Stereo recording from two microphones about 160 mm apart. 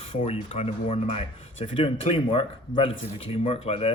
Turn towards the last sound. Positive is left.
turn(degrees=35)  # may be behind; listen again after turning